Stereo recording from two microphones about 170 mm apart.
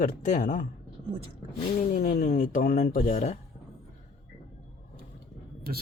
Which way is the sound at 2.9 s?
45° left (ahead or behind).